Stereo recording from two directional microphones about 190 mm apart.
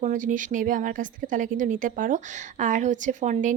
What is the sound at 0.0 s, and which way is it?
A woman's voice, 40° right (ahead or behind).